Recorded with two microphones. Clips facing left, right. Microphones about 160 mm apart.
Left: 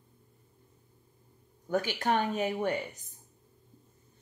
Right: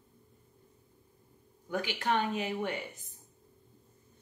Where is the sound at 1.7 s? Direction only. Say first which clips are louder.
Left 3 dB; 45° left (ahead or behind).